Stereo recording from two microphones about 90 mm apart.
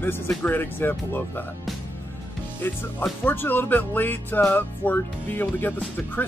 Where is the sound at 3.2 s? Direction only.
25° left (ahead or behind).